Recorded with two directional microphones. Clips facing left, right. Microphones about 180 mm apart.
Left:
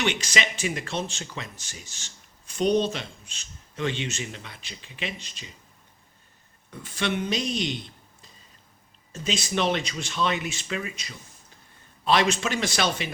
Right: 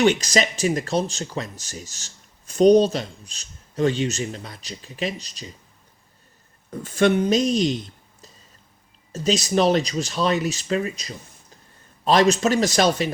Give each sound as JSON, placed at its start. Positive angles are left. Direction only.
{"t": 0.0, "sound": "speech", "side_deg": -40}
{"t": 6.7, "sound": "speech", "side_deg": -45}
{"t": 9.1, "sound": "speech", "side_deg": -40}